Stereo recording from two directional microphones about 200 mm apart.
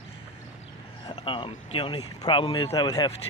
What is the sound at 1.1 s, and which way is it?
Speech, 25° left (ahead or behind).